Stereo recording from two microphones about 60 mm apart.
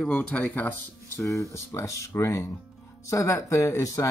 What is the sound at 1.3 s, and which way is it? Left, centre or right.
Speech, left.